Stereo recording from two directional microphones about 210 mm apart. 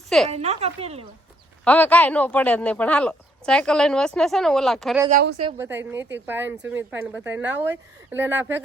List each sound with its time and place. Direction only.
0.3 s speech: 30° right (ahead or behind)
1.6 s speech: 5° left (ahead or behind)
5.5 s speech: 10° right (ahead or behind)